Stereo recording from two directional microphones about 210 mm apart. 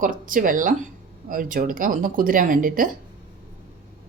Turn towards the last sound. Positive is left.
turn(degrees=-40)  # may be behind; listen again after turning